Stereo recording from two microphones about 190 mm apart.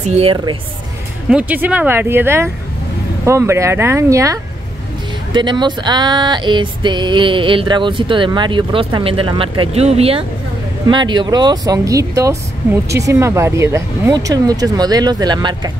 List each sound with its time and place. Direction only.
0.0 s a woman's voice: 35° right (ahead or behind)
1.3 s speech: 10° right (ahead or behind)
5.3 s a sound: 25° right (ahead or behind)